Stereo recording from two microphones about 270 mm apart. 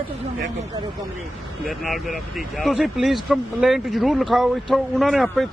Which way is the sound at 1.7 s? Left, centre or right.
Centre.